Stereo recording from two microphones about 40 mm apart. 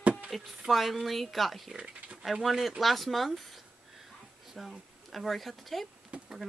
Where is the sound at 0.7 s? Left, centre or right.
Centre.